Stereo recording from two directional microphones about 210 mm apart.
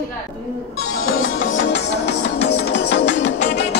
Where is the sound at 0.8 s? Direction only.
70° left (ahead or behind).